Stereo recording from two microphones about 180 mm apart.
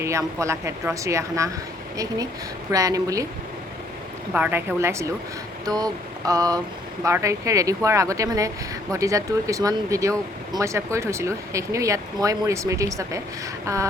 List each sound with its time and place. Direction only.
0.0 s speech: 15° right (ahead or behind)
2.7 s a woman's voice: 20° right (ahead or behind)
4.4 s speech: 10° right (ahead or behind)
5.6 s a sound: 20° right (ahead or behind)
7.0 s speech: 15° right (ahead or behind)